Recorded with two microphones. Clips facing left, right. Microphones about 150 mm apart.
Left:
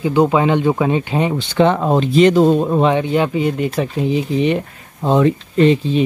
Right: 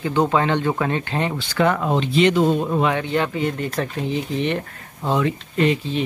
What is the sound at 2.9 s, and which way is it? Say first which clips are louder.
Speech: left 6 dB; 15° left (ahead or behind).